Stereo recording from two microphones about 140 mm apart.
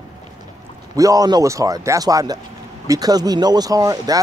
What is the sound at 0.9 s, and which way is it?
Speech, 25° right (ahead or behind).